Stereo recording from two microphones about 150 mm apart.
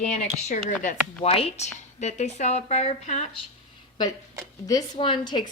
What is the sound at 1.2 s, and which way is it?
Speech, 40° left (ahead or behind).